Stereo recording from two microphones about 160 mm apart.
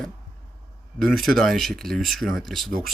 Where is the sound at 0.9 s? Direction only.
Centre (ahead or behind).